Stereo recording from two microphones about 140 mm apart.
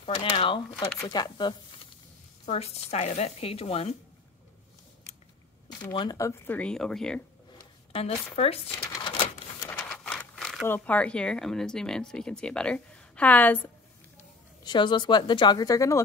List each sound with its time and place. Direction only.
0.0 s speech: 35° left (ahead or behind)
2.4 s speech: 50° left (ahead or behind)
5.9 s speech: 25° left (ahead or behind); by 7.2 s 5° left (ahead or behind)
8.4 s speech: 45° left (ahead or behind)
8.7 s a sound: 25° left (ahead or behind)
9.7 s a sound: 15° left (ahead or behind)
10.7 s speech: 10° left (ahead or behind)
14.6 s speech: 35° left (ahead or behind)